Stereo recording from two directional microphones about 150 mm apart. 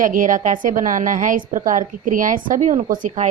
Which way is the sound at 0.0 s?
60° right (ahead or behind).